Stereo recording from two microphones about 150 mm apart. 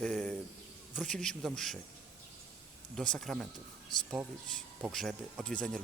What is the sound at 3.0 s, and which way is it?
Speech, 5° left (ahead or behind).